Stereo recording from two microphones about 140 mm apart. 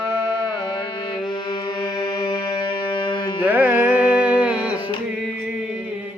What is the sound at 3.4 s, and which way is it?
Music, 10° right (ahead or behind).